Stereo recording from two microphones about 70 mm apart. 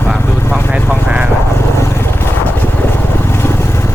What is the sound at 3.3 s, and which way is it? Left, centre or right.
Vehicle, left.